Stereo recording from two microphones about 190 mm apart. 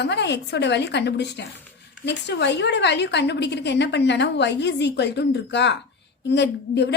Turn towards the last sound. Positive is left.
turn(degrees=65)  # may be behind; listen again after turning